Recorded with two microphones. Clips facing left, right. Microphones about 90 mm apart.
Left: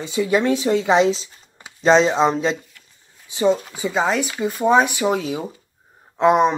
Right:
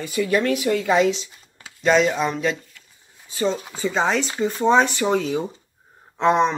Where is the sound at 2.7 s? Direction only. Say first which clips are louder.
Even; centre (ahead or behind).